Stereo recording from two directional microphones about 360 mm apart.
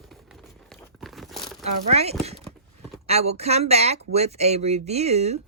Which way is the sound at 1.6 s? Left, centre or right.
Centre.